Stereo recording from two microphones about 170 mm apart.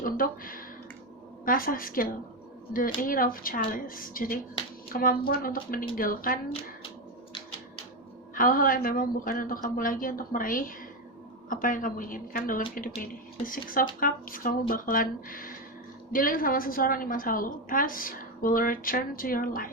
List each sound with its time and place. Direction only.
0.0 s a woman's voice: 55° left (ahead or behind)
8.4 s a woman's voice: 55° left (ahead or behind)